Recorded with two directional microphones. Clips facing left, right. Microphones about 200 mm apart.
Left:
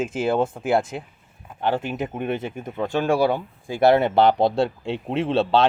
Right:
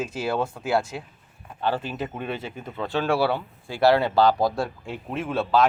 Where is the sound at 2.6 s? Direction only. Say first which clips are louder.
Even; 15° left (ahead or behind).